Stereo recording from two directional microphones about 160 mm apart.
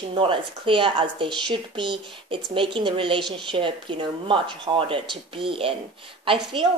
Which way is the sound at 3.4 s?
30° right (ahead or behind).